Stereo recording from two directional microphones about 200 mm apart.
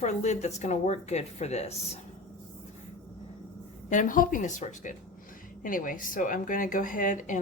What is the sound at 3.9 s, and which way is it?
Speech, 40° left (ahead or behind).